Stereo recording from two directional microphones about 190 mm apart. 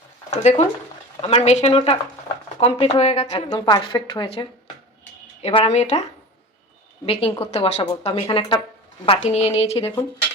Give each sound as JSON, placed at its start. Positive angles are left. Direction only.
{"t": 0.3, "sound": "a woman's voice", "side_deg": 35}
{"t": 3.5, "sound": "a woman's voice", "side_deg": 20}
{"t": 7.0, "sound": "a woman's voice", "side_deg": 30}
{"t": 9.0, "sound": "a woman's voice", "side_deg": 35}
{"t": 9.8, "sound": "speech", "side_deg": 10}